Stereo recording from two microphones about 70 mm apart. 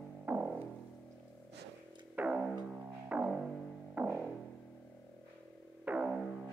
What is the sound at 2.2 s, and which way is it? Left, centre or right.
Music, centre.